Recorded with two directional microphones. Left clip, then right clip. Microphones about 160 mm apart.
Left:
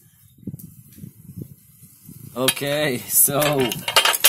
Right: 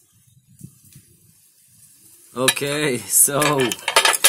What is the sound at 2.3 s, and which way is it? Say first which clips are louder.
Speech: right 1 dB; centre (ahead or behind).